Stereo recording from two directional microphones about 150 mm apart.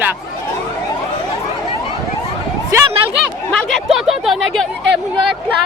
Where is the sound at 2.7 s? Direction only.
20° right (ahead or behind).